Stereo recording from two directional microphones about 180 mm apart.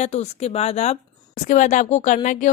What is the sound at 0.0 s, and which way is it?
A woman's voice, 40° left (ahead or behind).